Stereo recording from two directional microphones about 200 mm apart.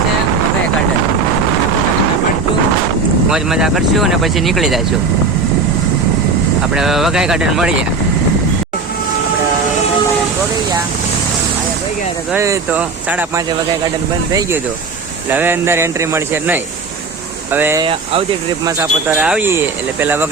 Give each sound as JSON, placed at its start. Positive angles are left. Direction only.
{"t": 3.2, "sound": "speech", "side_deg": -5}
{"t": 6.7, "sound": "speech", "side_deg": 0}
{"t": 12.3, "sound": "speech", "side_deg": -10}
{"t": 15.3, "sound": "speech", "side_deg": -10}
{"t": 17.8, "sound": "speech", "side_deg": -25}
{"t": 18.8, "sound": "speech", "side_deg": -5}